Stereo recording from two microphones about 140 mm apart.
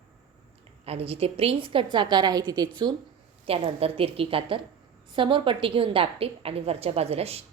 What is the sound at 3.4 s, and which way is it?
A woman's voice, 45° right (ahead or behind).